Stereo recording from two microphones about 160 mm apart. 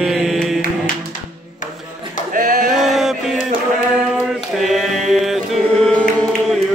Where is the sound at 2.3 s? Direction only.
60° right (ahead or behind).